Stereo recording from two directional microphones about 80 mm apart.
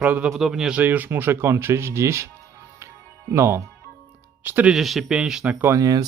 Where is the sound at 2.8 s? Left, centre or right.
Right.